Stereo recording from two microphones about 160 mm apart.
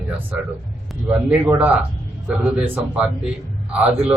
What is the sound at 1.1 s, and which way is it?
Speech, 10° right (ahead or behind).